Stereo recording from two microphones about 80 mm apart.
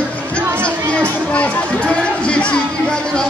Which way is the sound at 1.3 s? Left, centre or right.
Centre.